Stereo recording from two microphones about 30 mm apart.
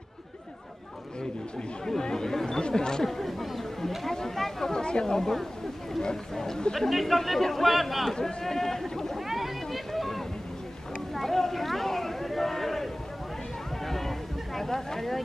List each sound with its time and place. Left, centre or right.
1.9 s chatter: left
2.6 s speech: left
3.1 s chatter: centre
4.1 s a sound: centre
4.7 s a man's voice: left
6.9 s a man's voice: centre
8.1 s a man's voice: centre
9.3 s boat: centre
11.1 s a sound: centre
15.0 s a man's voice: centre